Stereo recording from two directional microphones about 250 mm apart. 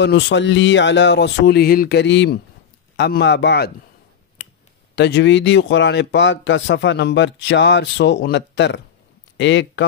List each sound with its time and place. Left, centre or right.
0.0 s a man's voice: left
4.4 s a sound: left
4.9 s a man's voice: left